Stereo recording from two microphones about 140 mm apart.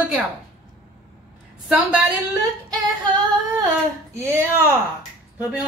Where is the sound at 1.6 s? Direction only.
10° right (ahead or behind).